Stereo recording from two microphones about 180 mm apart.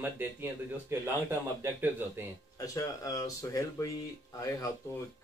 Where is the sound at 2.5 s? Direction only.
20° left (ahead or behind).